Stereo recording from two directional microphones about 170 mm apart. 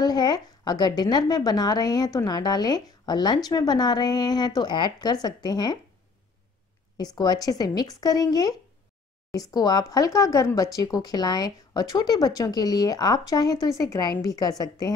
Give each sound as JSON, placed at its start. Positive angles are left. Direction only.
{"t": 0.0, "sound": "speech", "side_deg": 25}
{"t": 7.0, "sound": "speech", "side_deg": 25}